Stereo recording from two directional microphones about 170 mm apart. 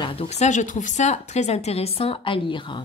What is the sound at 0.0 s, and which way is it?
Speech, 35° left (ahead or behind).